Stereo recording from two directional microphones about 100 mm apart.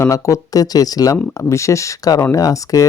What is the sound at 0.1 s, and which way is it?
Speech, 35° left (ahead or behind).